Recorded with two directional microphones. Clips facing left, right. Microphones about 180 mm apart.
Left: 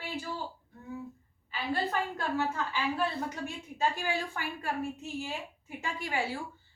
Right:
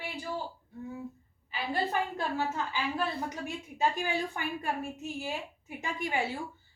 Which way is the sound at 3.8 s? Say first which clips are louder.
Right 1 dB; 20° right (ahead or behind).